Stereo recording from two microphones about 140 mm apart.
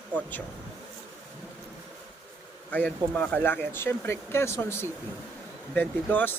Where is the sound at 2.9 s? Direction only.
10° left (ahead or behind).